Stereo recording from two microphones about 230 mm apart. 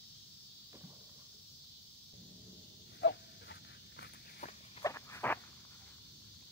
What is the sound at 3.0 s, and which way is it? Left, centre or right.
Dog, left.